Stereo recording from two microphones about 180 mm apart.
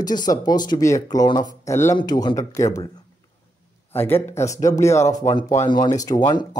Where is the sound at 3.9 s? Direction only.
10° left (ahead or behind).